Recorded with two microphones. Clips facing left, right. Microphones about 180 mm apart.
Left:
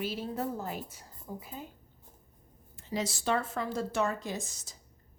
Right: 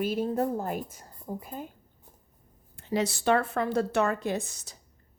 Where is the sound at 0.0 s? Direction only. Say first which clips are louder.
Right 7 dB; 50° right (ahead or behind).